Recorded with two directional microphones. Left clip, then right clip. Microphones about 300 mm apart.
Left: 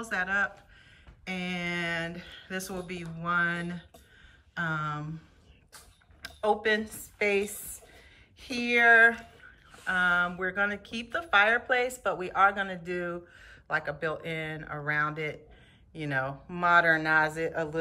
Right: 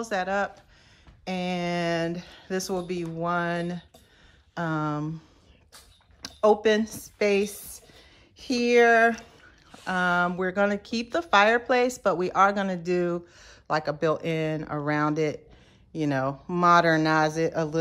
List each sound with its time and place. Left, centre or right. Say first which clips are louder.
0.0 s speech: right 2 dB; centre
6.2 s speech: right 6 dB; centre